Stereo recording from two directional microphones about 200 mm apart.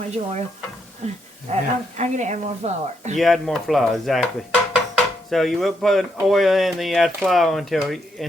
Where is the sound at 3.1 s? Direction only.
Centre (ahead or behind).